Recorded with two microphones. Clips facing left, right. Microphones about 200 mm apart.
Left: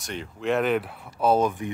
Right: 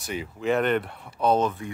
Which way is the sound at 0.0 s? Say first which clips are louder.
Right 1 dB; 5° right (ahead or behind).